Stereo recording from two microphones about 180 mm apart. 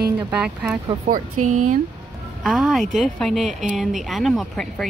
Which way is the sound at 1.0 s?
45° right (ahead or behind).